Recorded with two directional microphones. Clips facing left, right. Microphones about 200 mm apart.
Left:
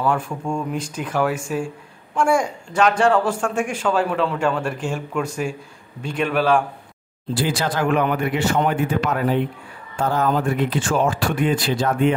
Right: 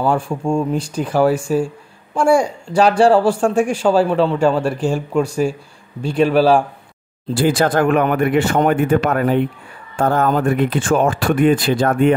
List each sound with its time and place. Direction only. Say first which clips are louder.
0.0 s speech: right 4 dB; 30° right (ahead or behind)
7.3 s speech: right 7 dB; 50° right (ahead or behind)